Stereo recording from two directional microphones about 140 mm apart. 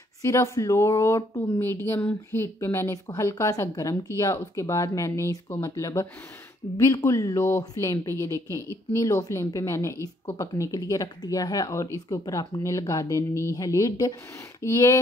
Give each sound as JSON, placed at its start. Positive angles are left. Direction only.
{"t": 0.2, "sound": "speech", "side_deg": 20}